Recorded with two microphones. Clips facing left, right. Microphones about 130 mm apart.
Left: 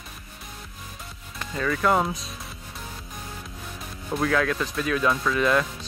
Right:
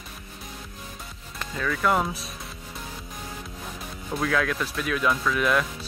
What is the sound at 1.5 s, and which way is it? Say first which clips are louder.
Speech: left 2 dB; centre (ahead or behind).